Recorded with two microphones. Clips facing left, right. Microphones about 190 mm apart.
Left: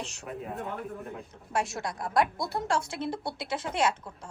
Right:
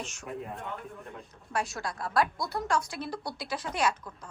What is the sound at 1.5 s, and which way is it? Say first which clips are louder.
A woman's voice: left 2 dB; 25° left (ahead or behind).